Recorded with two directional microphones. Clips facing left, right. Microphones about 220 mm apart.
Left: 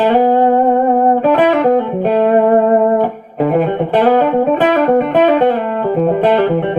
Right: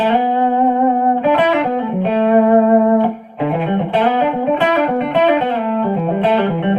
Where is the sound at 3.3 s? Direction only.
45° left (ahead or behind).